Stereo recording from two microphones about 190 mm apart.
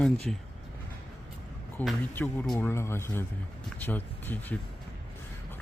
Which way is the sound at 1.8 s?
10° left (ahead or behind).